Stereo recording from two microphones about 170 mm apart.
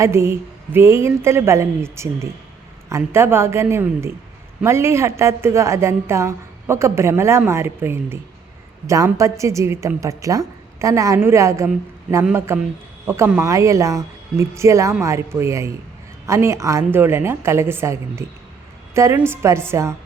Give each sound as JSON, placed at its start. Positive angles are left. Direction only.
{"t": 0.0, "sound": "a woman's voice", "side_deg": -15}